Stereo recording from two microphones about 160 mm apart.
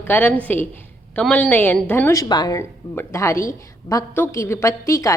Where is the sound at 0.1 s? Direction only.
10° left (ahead or behind).